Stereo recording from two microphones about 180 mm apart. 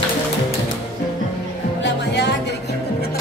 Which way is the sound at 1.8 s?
75° left (ahead or behind).